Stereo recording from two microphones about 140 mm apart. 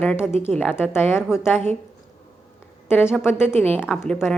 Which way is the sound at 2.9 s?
15° left (ahead or behind).